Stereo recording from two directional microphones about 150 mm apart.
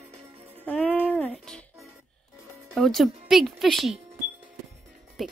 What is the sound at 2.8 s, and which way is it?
Speech, centre (ahead or behind).